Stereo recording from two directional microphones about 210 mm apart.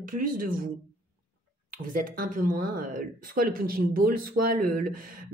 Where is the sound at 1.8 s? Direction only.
40° right (ahead or behind).